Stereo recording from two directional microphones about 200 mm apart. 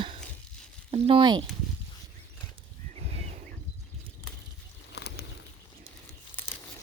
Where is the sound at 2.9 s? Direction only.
30° right (ahead or behind).